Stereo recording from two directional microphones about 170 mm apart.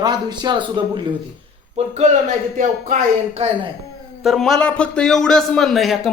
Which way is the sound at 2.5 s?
50° right (ahead or behind).